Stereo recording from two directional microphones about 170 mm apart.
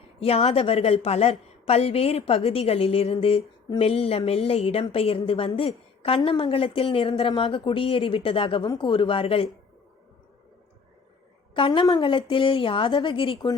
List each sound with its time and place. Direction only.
0.2 s a woman's voice: 35° left (ahead or behind)
11.5 s a woman's voice: 30° left (ahead or behind)